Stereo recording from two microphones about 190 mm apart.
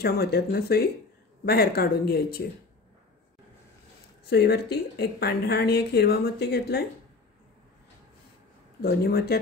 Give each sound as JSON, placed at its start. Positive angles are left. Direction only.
{"t": 0.0, "sound": "a woman's voice", "side_deg": 55}
{"t": 4.3, "sound": "a woman's voice", "side_deg": 60}
{"t": 8.8, "sound": "a woman's voice", "side_deg": 55}